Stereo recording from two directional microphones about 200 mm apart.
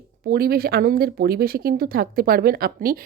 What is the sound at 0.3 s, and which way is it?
Speech, 50° right (ahead or behind).